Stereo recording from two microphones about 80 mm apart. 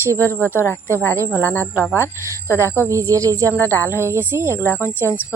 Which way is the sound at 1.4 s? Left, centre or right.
Left.